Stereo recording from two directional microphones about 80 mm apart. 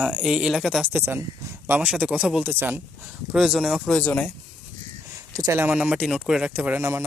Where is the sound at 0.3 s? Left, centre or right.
Centre.